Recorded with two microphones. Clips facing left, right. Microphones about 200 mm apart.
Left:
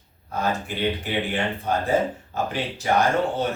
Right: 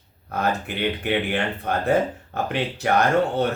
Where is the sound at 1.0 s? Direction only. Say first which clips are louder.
Right 2 dB; 60° right (ahead or behind).